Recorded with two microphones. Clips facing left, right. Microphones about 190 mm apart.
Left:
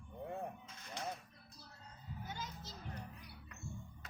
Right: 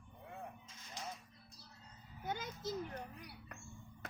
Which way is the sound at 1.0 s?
60° left (ahead or behind).